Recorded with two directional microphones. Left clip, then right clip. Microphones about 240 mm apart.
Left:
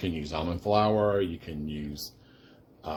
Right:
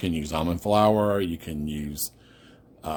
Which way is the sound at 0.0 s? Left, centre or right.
Right.